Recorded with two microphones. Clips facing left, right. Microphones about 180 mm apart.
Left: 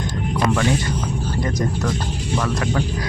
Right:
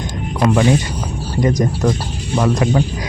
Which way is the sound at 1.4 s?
20° right (ahead or behind).